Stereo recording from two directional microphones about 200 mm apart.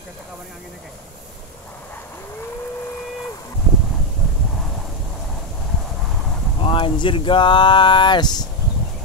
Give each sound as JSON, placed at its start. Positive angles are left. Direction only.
{"t": 6.6, "sound": "speech", "side_deg": 25}